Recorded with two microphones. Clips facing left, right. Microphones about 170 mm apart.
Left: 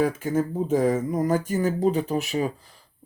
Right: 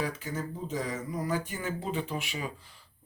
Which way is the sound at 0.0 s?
50° left (ahead or behind).